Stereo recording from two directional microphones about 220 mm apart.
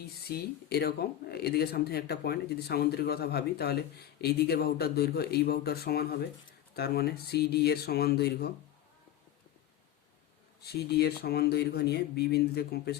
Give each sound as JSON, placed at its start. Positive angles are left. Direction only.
{"t": 0.0, "sound": "speech", "side_deg": 45}
{"t": 10.7, "sound": "speech", "side_deg": 45}